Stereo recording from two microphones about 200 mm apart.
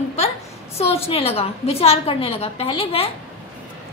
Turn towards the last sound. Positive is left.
turn(degrees=30)  # may be behind; listen again after turning